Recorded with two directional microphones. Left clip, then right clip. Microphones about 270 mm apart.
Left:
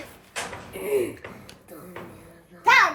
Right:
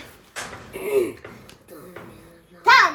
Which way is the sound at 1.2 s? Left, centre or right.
Left.